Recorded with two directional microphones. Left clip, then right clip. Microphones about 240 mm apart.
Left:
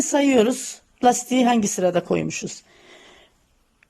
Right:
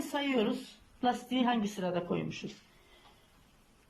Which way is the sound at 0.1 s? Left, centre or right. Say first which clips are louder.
Left 14 dB; left.